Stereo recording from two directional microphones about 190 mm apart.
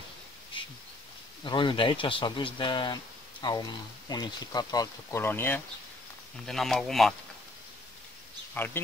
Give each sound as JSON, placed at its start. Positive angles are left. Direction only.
{"t": 1.4, "sound": "speech", "side_deg": 25}
{"t": 8.5, "sound": "a man's voice", "side_deg": 10}